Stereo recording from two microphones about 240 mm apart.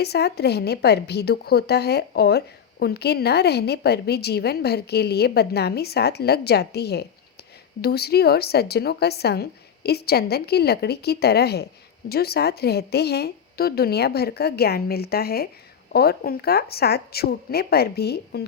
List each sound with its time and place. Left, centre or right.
0.0 s a woman's voice: left